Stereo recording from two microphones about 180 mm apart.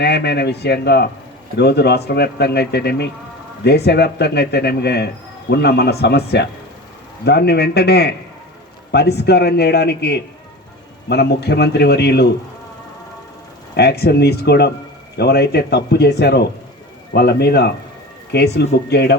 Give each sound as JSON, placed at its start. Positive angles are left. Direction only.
{"t": 0.0, "sound": "a man's voice", "side_deg": 65}
{"t": 13.7, "sound": "a man's voice", "side_deg": 65}